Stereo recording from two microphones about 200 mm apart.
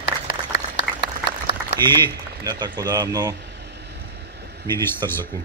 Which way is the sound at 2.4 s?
20° right (ahead or behind).